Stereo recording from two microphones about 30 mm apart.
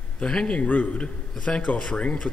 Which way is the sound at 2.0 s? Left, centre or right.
Left.